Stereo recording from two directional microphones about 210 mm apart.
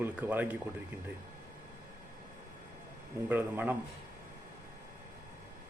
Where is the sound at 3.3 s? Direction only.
10° right (ahead or behind).